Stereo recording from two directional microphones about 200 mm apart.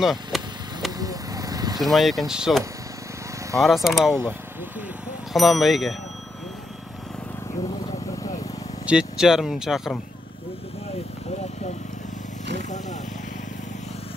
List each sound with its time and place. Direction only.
0.0 s speech: centre (ahead or behind)
0.9 s vehicle: 20° right (ahead or behind)
1.8 s speech: centre (ahead or behind)
4.1 s speech: 10° right (ahead or behind)
5.3 s speech: centre (ahead or behind)
8.8 s speech: 5° right (ahead or behind)
12.5 s vehicle: 35° left (ahead or behind)